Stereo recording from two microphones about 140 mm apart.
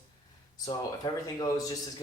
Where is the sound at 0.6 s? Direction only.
30° left (ahead or behind).